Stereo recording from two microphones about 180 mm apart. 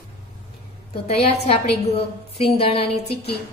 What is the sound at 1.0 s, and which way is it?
A woman's voice, 35° left (ahead or behind).